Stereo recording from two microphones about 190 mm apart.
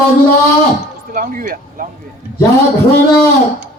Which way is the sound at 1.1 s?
45° right (ahead or behind).